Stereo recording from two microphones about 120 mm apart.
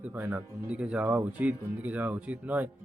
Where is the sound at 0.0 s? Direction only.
15° right (ahead or behind).